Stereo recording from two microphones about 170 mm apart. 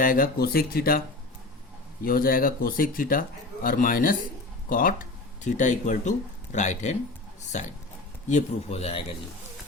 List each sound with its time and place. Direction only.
0.0 s a man's voice: 55° left (ahead or behind); by 9.0 s 35° left (ahead or behind)